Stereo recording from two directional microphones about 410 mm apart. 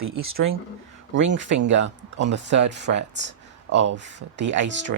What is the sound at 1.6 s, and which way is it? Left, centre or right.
Speech, right.